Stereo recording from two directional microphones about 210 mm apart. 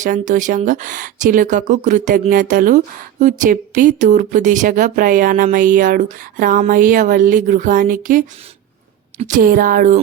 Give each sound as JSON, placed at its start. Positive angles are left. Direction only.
{"t": 0.0, "sound": "speech", "side_deg": -40}